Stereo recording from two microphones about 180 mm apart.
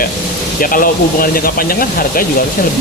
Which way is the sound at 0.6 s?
50° left (ahead or behind).